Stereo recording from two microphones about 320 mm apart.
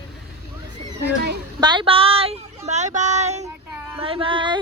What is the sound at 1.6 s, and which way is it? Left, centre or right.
Female singing, centre.